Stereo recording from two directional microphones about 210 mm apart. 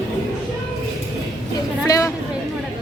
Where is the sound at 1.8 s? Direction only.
15° left (ahead or behind).